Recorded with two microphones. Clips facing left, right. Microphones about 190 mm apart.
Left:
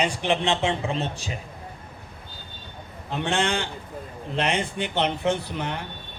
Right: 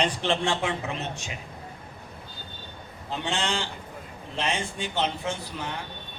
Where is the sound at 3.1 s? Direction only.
55° left (ahead or behind).